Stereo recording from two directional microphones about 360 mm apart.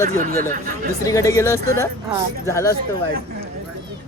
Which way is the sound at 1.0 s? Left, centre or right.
Centre.